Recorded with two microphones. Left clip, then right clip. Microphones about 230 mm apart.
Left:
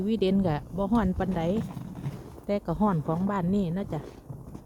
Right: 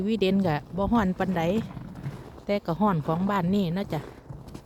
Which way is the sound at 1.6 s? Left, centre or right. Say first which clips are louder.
Even; left.